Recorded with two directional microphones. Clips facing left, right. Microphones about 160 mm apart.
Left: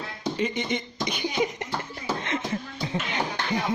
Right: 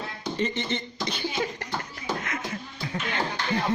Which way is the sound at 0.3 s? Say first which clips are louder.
Even; 10° left (ahead or behind).